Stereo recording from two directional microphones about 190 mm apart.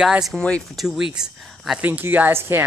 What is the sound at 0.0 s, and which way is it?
Speech, 5° right (ahead or behind).